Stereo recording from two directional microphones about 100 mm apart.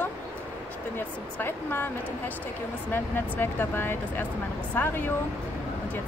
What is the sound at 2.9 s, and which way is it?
Speech, 20° left (ahead or behind).